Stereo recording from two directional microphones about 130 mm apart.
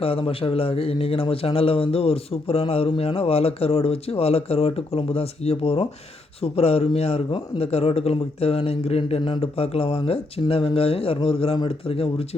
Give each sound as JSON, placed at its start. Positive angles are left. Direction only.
{"t": 0.0, "sound": "a man's voice", "side_deg": 45}